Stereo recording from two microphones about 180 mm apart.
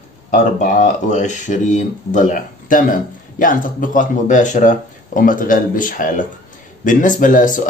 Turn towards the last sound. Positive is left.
turn(degrees=45)  # may be behind; listen again after turning